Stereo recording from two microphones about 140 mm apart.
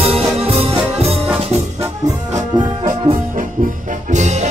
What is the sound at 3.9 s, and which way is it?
Music, 60° right (ahead or behind).